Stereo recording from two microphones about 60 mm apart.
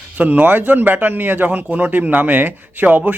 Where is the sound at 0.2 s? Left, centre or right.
Right.